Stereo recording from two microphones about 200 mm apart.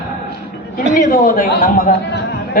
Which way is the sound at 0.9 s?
40° left (ahead or behind).